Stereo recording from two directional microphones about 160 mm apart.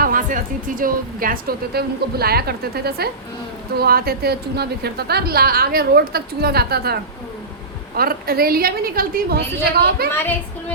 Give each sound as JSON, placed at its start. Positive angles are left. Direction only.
{"t": 0.0, "sound": "a woman's voice", "side_deg": -55}